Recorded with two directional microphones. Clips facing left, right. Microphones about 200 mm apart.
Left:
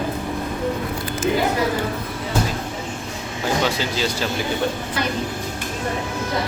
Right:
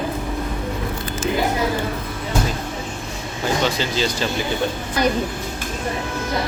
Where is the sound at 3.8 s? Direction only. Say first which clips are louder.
Right 1 dB; 5° left (ahead or behind).